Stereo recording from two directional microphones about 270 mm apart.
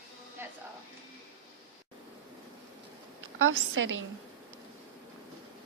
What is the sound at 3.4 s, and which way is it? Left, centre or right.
Speech, right.